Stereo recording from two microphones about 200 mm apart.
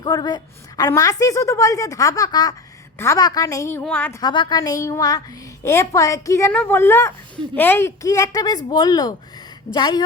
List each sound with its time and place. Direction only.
0.0 s a woman's voice: 20° left (ahead or behind)
4.2 s a woman's voice: 20° left (ahead or behind)